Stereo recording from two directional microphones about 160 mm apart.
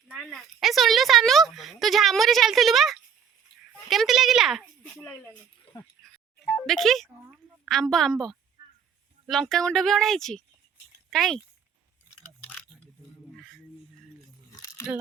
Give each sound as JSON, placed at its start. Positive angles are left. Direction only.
{"t": 0.1, "sound": "a woman's voice", "side_deg": 0}
{"t": 6.7, "sound": "speech", "side_deg": 0}
{"t": 13.3, "sound": "music", "side_deg": 5}
{"t": 14.5, "sound": "a sound", "side_deg": 25}